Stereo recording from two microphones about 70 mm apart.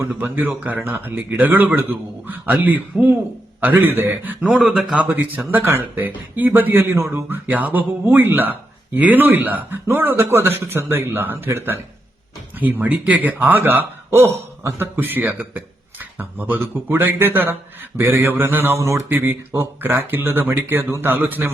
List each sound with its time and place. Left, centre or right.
0.2 s a man's voice: right
4.6 s speech: centre
4.9 s a man's voice: right
7.3 s a man's voice: right
14.9 s speech: right
18.8 s speech: right
19.1 s a man's voice: right